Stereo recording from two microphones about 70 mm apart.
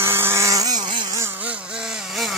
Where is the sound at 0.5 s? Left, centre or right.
Right.